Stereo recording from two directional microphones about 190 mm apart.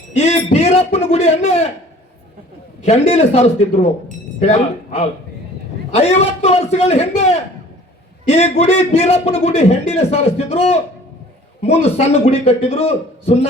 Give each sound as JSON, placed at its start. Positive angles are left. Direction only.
{"t": 0.2, "sound": "speech", "side_deg": 35}
{"t": 2.8, "sound": "a man's voice", "side_deg": 30}